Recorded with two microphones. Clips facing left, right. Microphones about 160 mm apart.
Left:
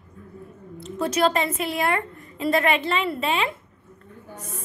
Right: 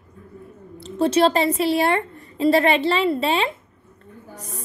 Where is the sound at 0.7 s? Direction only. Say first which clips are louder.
Right 5 dB; 30° right (ahead or behind).